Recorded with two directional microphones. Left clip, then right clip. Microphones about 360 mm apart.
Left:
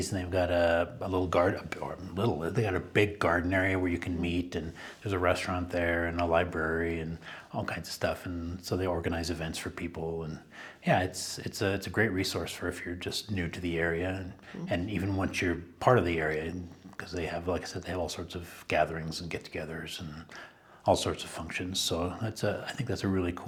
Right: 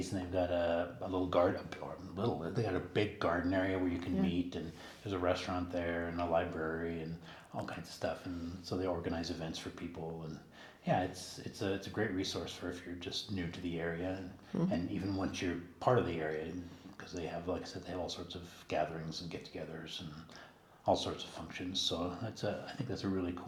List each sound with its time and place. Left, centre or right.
0.1 s speech: left
10.9 s speech: left
20.8 s speech: left